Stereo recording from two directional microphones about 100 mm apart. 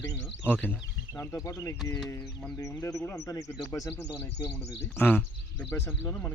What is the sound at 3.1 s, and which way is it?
Speech, 30° left (ahead or behind).